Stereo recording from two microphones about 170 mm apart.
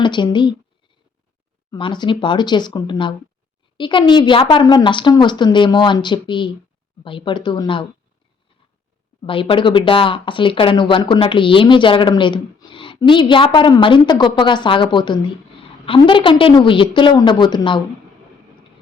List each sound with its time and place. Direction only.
0.0 s speech: 25° left (ahead or behind)
1.7 s speech: 25° left (ahead or behind)
9.2 s speech: 30° left (ahead or behind)